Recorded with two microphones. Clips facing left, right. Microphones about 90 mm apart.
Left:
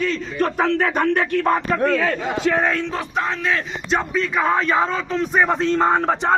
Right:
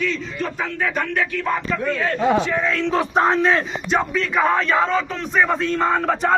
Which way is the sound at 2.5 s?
75° left (ahead or behind).